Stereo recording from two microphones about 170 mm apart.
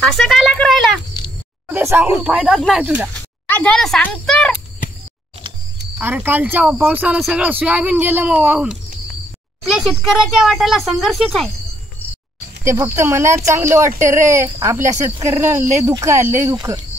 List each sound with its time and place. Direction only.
0.0 s a child's voice: centre (ahead or behind)
1.7 s speech: 15° right (ahead or behind)
3.2 s speech: 10° left (ahead or behind)
5.9 s a child's voice: 10° right (ahead or behind)
12.6 s speech: 15° right (ahead or behind)